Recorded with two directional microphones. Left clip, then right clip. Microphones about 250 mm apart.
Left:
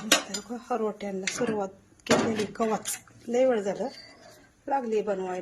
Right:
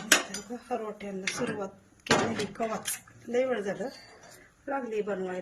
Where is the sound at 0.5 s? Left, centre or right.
Centre.